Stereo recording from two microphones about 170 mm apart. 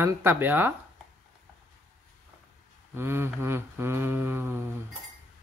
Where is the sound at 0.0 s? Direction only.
10° right (ahead or behind).